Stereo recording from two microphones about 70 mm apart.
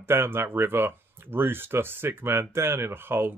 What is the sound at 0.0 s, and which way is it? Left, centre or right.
Speech, right.